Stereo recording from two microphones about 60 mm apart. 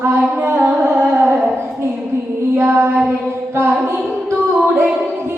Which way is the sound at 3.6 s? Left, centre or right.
Right.